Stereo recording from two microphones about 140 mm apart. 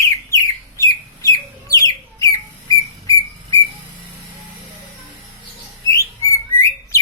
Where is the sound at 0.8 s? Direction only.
25° left (ahead or behind).